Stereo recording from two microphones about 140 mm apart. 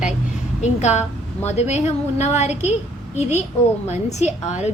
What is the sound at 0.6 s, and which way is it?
A woman's voice, 55° left (ahead or behind).